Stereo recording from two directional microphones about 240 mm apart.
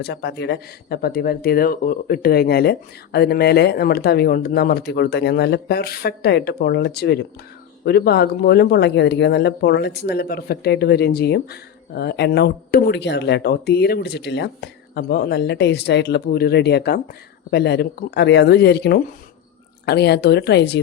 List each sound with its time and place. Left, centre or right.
0.0 s speech: left